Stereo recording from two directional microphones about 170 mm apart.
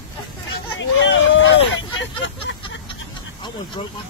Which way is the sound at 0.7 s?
90° left.